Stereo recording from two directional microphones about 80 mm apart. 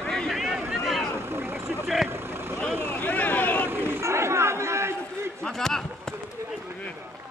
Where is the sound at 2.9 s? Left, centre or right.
Centre.